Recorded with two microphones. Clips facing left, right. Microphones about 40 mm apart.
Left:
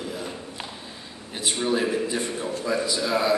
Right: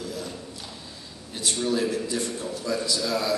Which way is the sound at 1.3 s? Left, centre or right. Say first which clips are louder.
Left 1 dB; left.